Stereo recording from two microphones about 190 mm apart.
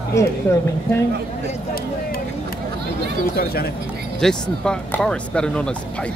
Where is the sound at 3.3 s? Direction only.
55° left (ahead or behind).